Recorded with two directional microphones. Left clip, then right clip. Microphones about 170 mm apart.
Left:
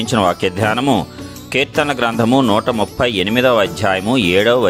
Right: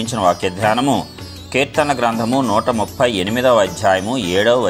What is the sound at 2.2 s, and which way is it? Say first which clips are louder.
Speech: left 2 dB; 85° left.